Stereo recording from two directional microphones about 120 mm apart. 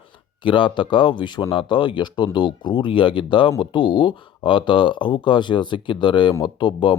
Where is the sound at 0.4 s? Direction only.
45° left (ahead or behind).